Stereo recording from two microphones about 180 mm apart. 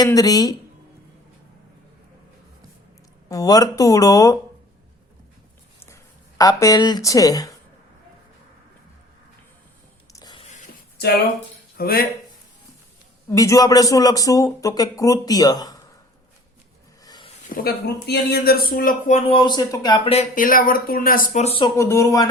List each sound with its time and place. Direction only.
0.0 s speech: 20° left (ahead or behind)
3.2 s speech: 20° left (ahead or behind)
5.8 s speech: 15° left (ahead or behind)
10.1 s a sound: 20° left (ahead or behind)
11.8 s speech: 55° left (ahead or behind)
13.3 s speech: 20° left (ahead or behind)
17.5 s speech: 55° left (ahead or behind); by 20.2 s 30° left (ahead or behind)
20.3 s speech: 50° left (ahead or behind)
21.6 s speech: 15° left (ahead or behind)